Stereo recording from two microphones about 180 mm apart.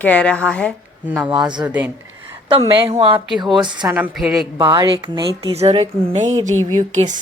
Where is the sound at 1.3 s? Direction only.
25° right (ahead or behind).